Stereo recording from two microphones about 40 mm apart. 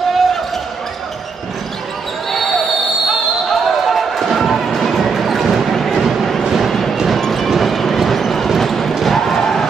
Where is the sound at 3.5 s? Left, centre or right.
Centre.